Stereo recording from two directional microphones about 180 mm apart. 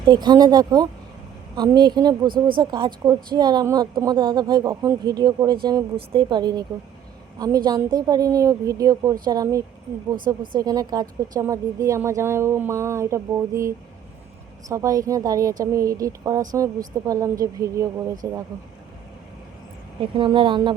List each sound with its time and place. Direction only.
0.1 s a woman's voice: 25° right (ahead or behind)
20.0 s a woman's voice: 25° right (ahead or behind)